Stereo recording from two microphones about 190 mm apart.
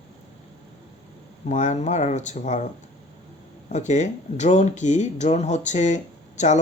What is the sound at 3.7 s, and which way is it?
Speech, 40° left (ahead or behind).